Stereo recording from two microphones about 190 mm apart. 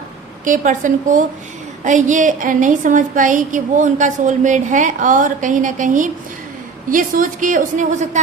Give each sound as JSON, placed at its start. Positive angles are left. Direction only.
{"t": 0.4, "sound": "a woman's voice", "side_deg": -45}